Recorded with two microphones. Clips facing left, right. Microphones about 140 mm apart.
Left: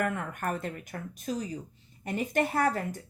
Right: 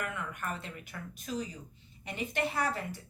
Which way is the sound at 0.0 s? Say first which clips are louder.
Left 7 dB; 50° left (ahead or behind).